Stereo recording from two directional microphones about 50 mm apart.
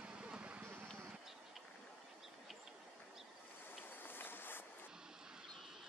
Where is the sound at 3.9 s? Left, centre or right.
Left.